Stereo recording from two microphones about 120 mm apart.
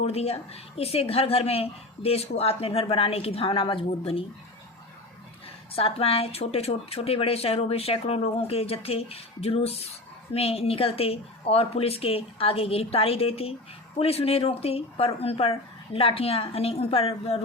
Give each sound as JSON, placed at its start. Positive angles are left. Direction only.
{"t": 0.0, "sound": "a woman's voice", "side_deg": 55}
{"t": 5.7, "sound": "a woman's voice", "side_deg": 55}